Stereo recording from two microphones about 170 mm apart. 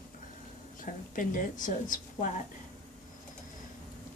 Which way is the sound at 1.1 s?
50° left (ahead or behind).